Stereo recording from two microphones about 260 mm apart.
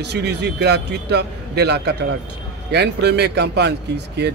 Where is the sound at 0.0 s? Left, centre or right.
Right.